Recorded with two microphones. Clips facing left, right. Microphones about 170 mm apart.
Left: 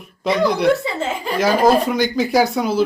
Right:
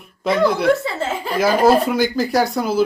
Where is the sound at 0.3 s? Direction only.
5° right (ahead or behind).